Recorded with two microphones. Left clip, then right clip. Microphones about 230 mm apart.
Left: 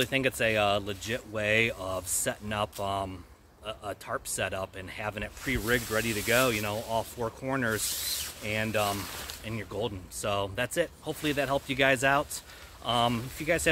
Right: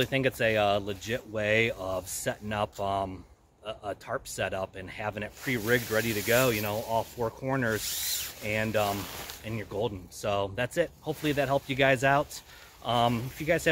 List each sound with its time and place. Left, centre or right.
0.0 s speech: centre
7.8 s speech: right
8.4 s speech: centre